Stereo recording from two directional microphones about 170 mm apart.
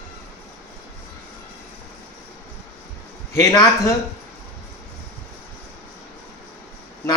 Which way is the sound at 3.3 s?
20° left (ahead or behind).